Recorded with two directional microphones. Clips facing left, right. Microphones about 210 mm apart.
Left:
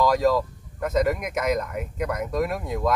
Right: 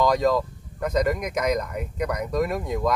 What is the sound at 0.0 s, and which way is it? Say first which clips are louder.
Speech: even; 5° left (ahead or behind).